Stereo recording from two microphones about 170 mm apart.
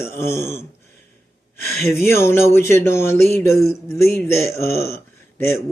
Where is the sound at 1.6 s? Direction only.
Centre (ahead or behind).